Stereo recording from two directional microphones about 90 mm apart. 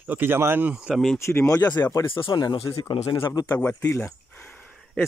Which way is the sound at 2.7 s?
85° left.